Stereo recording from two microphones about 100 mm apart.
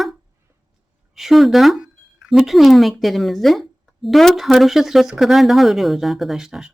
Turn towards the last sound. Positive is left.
turn(degrees=-5)  # may be behind; listen again after turning